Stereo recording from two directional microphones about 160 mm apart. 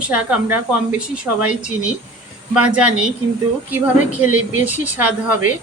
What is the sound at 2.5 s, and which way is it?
Speech, 10° right (ahead or behind).